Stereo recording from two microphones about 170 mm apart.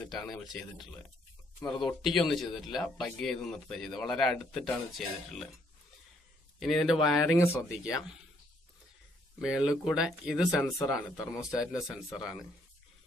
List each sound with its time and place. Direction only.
0.1 s speech: centre (ahead or behind)
6.6 s speech: centre (ahead or behind)
9.4 s speech: 5° right (ahead or behind)
10.6 s speech: 15° left (ahead or behind)
10.9 s speech: centre (ahead or behind)